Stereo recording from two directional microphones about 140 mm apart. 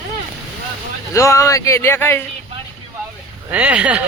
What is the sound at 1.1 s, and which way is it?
Speech, 20° left (ahead or behind).